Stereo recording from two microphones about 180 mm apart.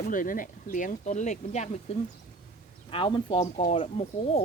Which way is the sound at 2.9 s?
30° left (ahead or behind).